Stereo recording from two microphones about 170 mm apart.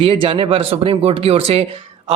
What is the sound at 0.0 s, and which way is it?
A man's voice, 30° right (ahead or behind).